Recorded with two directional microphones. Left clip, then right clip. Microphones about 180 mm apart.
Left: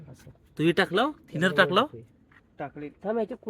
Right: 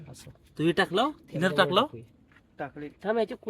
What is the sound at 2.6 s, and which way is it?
Speech, 20° left (ahead or behind).